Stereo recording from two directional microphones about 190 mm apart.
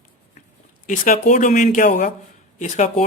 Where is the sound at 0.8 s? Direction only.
40° left (ahead or behind).